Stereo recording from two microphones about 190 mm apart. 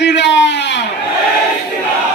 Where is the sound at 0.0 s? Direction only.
65° left (ahead or behind).